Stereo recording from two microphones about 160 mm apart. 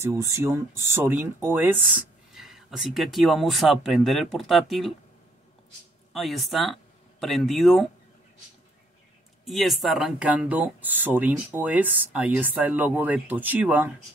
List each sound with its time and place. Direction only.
0.0 s speech: 15° right (ahead or behind); by 4.9 s centre (ahead or behind)
6.1 s speech: centre (ahead or behind)
9.4 s speech: centre (ahead or behind)